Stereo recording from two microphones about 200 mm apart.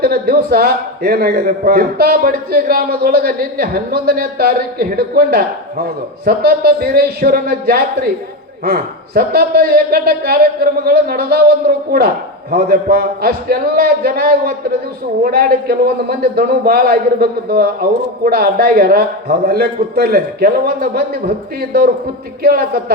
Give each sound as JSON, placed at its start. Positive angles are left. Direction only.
{"t": 0.0, "sound": "a man's voice", "side_deg": -50}